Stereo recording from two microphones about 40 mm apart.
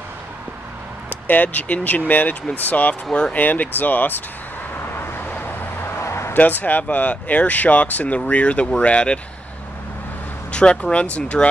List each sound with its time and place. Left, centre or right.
1.2 s speech: left
3.1 s speech: left
3.3 s speech: left
4.9 s vehicle: left
5.8 s a sound: left
6.3 s speech: left
10.5 s speech: left